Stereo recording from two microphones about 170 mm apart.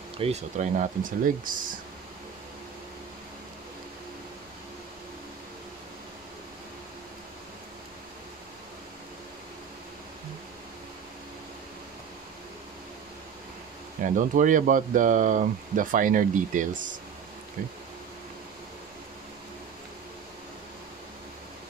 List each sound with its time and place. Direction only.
0.2 s speech: 40° right (ahead or behind)
14.0 s speech: 50° right (ahead or behind)